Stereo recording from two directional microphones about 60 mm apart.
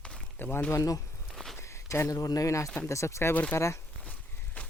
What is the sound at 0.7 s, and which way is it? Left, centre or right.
Speech, left.